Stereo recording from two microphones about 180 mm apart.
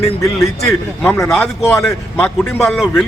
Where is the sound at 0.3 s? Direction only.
Centre (ahead or behind).